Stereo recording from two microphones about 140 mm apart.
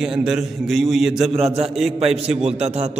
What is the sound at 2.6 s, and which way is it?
Speech, 50° right (ahead or behind).